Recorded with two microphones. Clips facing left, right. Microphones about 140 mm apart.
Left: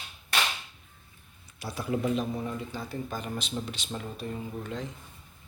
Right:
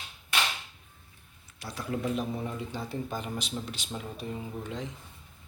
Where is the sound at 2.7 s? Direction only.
25° right (ahead or behind).